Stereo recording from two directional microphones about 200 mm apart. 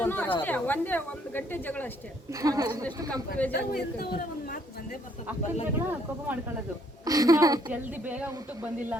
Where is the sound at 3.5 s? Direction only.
50° left (ahead or behind).